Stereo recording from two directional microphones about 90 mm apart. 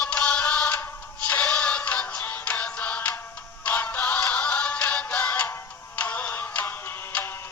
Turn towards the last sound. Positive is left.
turn(degrees=25)  # may be behind; listen again after turning